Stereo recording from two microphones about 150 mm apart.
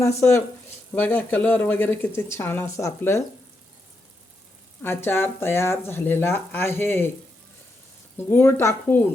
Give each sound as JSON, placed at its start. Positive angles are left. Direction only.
{"t": 0.0, "sound": "speech", "side_deg": 20}
{"t": 4.8, "sound": "speech", "side_deg": 15}
{"t": 8.3, "sound": "speech", "side_deg": 15}